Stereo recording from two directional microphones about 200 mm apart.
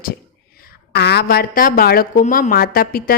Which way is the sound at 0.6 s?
55° left (ahead or behind).